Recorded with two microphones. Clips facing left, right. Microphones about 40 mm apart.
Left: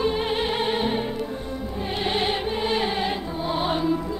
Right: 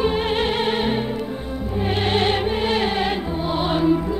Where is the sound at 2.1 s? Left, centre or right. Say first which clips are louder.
Right 5 dB; right.